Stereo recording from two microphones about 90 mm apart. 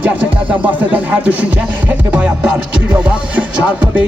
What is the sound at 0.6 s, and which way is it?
Music, 15° right (ahead or behind).